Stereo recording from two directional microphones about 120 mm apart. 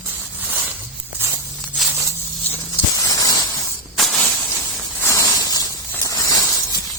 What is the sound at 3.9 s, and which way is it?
Snake, centre (ahead or behind).